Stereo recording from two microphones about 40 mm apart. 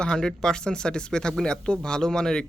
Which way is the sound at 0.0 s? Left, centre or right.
Centre.